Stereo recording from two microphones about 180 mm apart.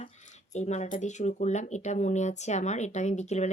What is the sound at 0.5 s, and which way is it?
Speech, 40° left (ahead or behind).